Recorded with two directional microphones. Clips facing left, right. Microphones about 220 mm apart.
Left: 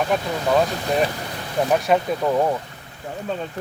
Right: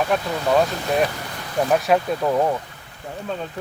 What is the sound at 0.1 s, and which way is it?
Speech, centre (ahead or behind).